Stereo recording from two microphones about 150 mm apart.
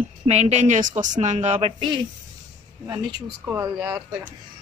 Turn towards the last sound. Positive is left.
turn(degrees=-10)  # may be behind; listen again after turning